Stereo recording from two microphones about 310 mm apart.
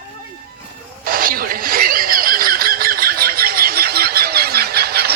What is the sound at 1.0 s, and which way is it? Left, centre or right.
Squeal, right.